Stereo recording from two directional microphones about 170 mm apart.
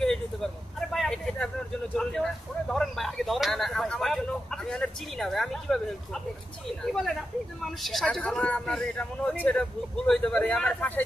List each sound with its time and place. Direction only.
0.0 s vehicle: 5° left (ahead or behind)
2.0 s a sound: 5° left (ahead or behind)
6.9 s speech: centre (ahead or behind)